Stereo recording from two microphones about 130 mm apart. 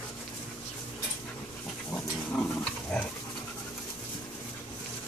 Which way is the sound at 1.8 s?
5° left (ahead or behind).